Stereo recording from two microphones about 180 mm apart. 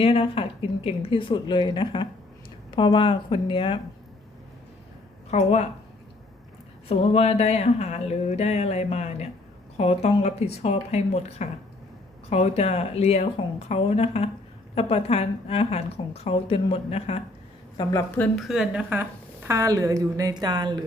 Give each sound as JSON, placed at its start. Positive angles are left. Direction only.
{"t": 0.0, "sound": "a woman's voice", "side_deg": 30}
{"t": 5.3, "sound": "speech", "side_deg": 35}
{"t": 6.8, "sound": "speech", "side_deg": 35}
{"t": 18.2, "sound": "a woman's voice", "side_deg": 0}